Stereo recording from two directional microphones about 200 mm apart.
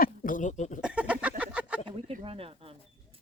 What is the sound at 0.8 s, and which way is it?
Speech, 5° right (ahead or behind).